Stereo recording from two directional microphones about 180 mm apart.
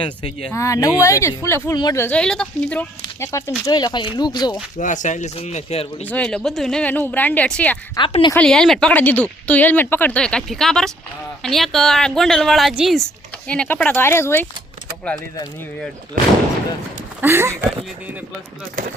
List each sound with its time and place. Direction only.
0.5 s speech: 15° left (ahead or behind)
4.8 s speech: 45° left (ahead or behind)
6.1 s speech: 5° left (ahead or behind)
7.9 s speech: 25° left (ahead or behind)
8.3 s speech: 5° left (ahead or behind)
17.2 s speech: 15° right (ahead or behind)